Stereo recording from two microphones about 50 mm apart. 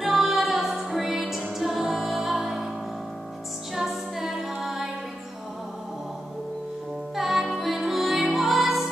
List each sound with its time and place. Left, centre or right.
0.0 s music: centre
3.7 s music: centre
7.2 s music: centre